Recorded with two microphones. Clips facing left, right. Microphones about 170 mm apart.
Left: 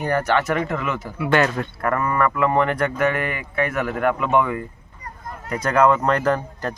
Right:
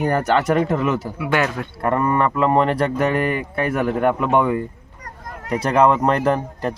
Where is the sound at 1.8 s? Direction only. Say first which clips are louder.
Right 3 dB; 30° right (ahead or behind).